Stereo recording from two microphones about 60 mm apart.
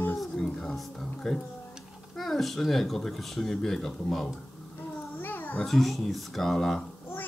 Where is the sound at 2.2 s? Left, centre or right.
Centre.